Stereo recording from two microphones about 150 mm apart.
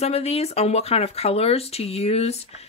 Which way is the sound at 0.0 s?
45° left (ahead or behind).